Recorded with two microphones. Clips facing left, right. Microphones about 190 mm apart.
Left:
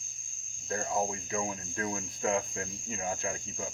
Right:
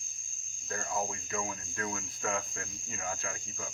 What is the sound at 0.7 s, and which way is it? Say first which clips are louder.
Speech: left 4 dB; 25° left (ahead or behind).